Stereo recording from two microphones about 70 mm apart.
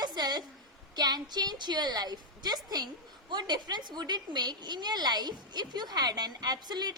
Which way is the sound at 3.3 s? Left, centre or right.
Right.